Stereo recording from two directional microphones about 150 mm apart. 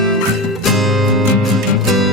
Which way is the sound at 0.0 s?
Centre (ahead or behind).